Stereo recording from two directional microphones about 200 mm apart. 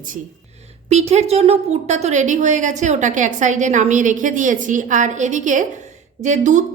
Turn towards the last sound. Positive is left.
turn(degrees=-35)  # may be behind; listen again after turning